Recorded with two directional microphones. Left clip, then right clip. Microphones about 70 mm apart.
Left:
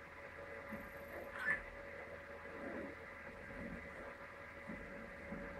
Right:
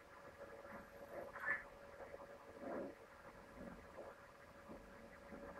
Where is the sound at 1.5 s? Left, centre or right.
Left.